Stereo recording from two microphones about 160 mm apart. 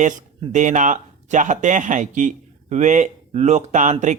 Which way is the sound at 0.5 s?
50° right (ahead or behind).